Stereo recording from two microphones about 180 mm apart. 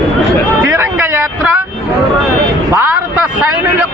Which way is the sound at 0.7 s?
10° right (ahead or behind).